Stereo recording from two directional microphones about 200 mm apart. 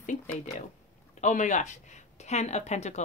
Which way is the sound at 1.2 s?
40° left (ahead or behind).